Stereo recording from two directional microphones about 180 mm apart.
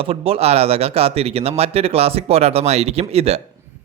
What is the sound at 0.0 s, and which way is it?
Speech, 30° right (ahead or behind).